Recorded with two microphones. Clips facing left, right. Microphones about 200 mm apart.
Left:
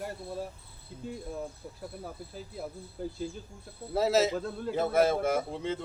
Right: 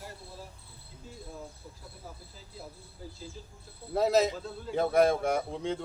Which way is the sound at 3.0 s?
60° left (ahead or behind).